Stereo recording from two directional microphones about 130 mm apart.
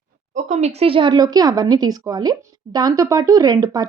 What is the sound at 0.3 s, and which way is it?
Speech, 65° right (ahead or behind).